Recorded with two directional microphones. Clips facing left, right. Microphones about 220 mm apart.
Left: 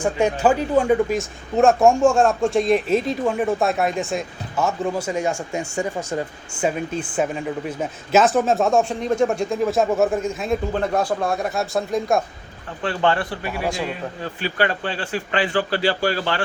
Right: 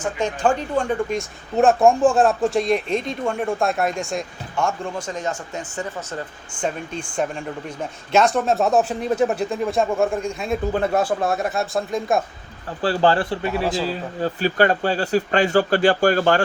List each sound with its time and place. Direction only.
0.0 s speech: 10° left (ahead or behind)
12.8 s a man's voice: 35° right (ahead or behind)
14.3 s speech: 40° right (ahead or behind)